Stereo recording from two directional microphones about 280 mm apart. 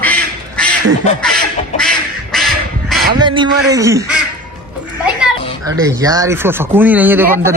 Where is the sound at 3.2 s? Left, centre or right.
Centre.